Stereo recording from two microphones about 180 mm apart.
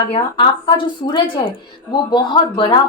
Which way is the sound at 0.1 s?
25° left (ahead or behind).